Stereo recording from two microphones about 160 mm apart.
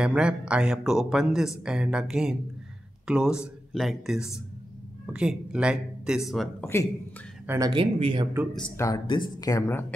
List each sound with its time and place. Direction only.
0.0 s speech: 5° right (ahead or behind)
6.6 s speech: 15° left (ahead or behind)
7.4 s speech: 20° right (ahead or behind)
7.7 s speech: 35° right (ahead or behind)
8.7 s speech: 20° left (ahead or behind)